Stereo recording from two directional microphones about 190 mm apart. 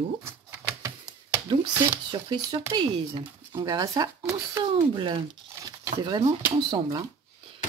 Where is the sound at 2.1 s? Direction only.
20° right (ahead or behind).